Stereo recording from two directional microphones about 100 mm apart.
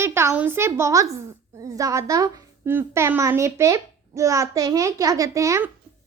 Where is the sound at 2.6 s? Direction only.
20° right (ahead or behind).